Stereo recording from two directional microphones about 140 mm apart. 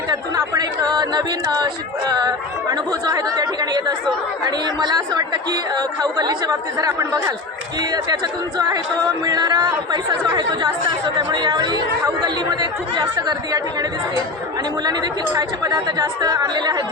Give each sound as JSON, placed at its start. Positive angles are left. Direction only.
{"t": 0.1, "sound": "speech", "side_deg": -30}
{"t": 14.8, "sound": "speech", "side_deg": -30}